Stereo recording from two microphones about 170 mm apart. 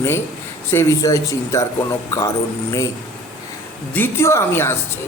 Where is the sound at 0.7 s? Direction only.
15° left (ahead or behind).